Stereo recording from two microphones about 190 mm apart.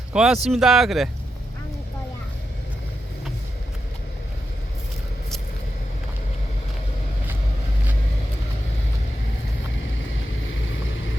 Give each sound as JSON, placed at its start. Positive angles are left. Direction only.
{"t": 0.1, "sound": "speech", "side_deg": -5}
{"t": 10.1, "sound": "vehicle", "side_deg": 90}